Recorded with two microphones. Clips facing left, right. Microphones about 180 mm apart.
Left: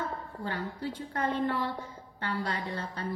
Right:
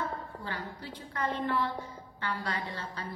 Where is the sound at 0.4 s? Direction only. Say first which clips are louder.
Left 5 dB; 40° left (ahead or behind).